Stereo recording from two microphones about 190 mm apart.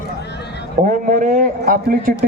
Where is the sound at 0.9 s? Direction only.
40° right (ahead or behind).